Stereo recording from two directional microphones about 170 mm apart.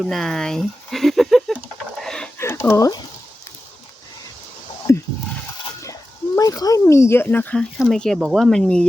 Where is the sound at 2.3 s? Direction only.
15° left (ahead or behind).